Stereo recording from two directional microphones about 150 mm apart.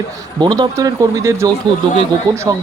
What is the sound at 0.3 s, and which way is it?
Speech, 30° right (ahead or behind).